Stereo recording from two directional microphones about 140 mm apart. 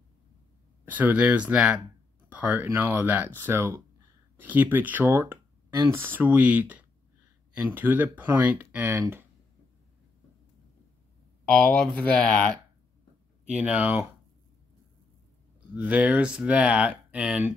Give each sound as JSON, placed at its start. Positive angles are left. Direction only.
{"t": 0.8, "sound": "speech", "side_deg": -10}
{"t": 11.6, "sound": "speech", "side_deg": 10}
{"t": 13.5, "sound": "speech", "side_deg": -10}
{"t": 15.7, "sound": "speech", "side_deg": -10}